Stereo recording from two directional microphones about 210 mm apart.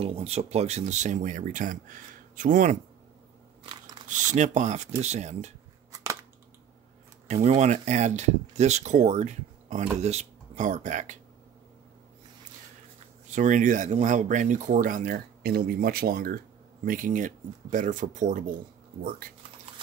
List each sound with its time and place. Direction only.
0.0 s speech: 30° right (ahead or behind)
3.6 s mechanisms: 20° right (ahead or behind)
4.1 s speech: 35° right (ahead or behind)
5.9 s scissors: 15° right (ahead or behind)
7.2 s speech: 30° right (ahead or behind)
13.3 s speech: 35° right (ahead or behind)